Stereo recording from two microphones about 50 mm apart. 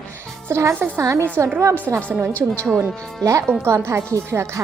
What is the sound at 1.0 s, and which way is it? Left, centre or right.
Music, right.